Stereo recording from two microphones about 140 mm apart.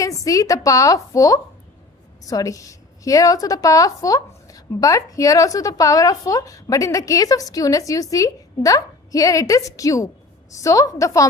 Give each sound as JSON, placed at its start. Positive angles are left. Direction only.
{"t": 0.0, "sound": "a woman's voice", "side_deg": 25}